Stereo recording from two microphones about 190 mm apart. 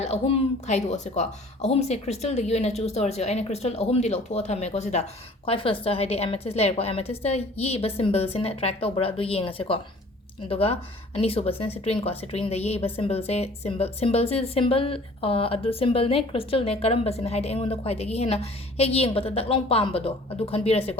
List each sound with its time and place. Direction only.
0.0 s speech: 30° left (ahead or behind)